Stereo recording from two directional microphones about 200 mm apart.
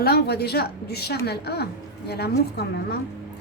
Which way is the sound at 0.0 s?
50° left (ahead or behind).